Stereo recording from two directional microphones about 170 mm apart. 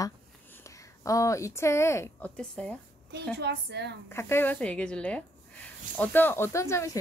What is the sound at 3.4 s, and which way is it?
Speech, 80° right.